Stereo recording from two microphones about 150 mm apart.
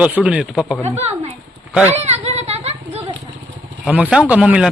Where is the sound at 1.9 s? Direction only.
45° right (ahead or behind).